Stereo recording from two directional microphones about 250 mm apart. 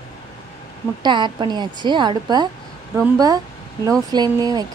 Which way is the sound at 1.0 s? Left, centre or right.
Centre.